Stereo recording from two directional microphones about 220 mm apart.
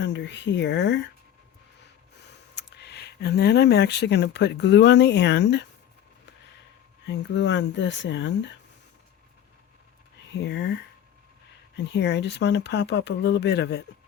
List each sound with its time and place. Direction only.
0.0 s speech: 55° left (ahead or behind)
2.3 s speech: 50° left (ahead or behind)
7.1 s speech: 55° left (ahead or behind)
10.3 s speech: 50° left (ahead or behind)
11.8 s speech: 50° left (ahead or behind)